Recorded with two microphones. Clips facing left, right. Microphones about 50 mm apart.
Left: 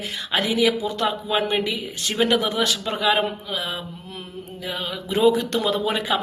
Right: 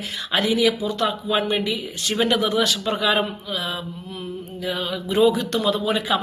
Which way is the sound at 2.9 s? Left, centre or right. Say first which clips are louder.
Even; centre.